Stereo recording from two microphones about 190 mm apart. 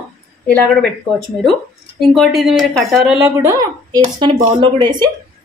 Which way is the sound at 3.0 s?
10° right (ahead or behind).